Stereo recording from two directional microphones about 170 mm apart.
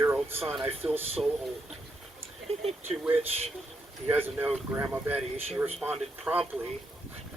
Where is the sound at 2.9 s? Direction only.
35° right (ahead or behind).